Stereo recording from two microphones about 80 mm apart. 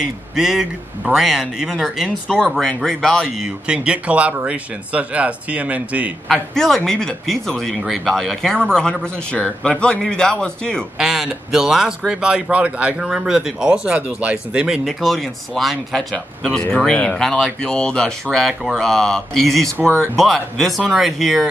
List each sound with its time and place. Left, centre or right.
0.0 s a man's voice: centre
2.2 s a man's voice: centre
3.3 s speech: centre
6.2 s a man's voice: centre
11.0 s a man's voice: centre
13.0 s speech: centre
14.9 s speech: centre
18.5 s speech: centre
18.8 s a man's voice: centre